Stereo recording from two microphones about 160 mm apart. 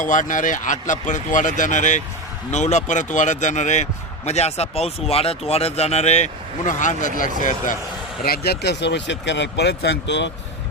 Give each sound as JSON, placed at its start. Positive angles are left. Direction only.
{"t": 0.0, "sound": "a man's voice", "side_deg": 55}
{"t": 8.2, "sound": "speech", "side_deg": 80}